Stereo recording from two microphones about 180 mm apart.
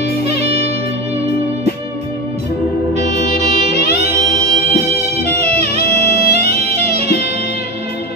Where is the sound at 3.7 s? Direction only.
35° right (ahead or behind).